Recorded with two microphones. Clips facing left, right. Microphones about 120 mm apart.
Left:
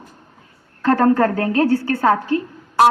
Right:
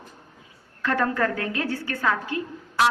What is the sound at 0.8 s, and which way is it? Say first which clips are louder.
A woman's voice: left 9 dB; 40° left (ahead or behind).